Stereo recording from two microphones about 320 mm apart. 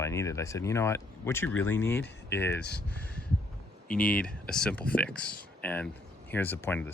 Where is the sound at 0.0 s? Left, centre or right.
Centre.